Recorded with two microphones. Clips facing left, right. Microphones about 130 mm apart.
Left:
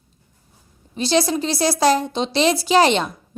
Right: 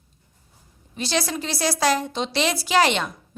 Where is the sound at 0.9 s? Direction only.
25° left (ahead or behind).